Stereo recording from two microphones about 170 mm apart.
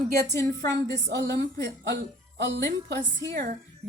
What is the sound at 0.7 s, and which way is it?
A woman's voice, 90° right.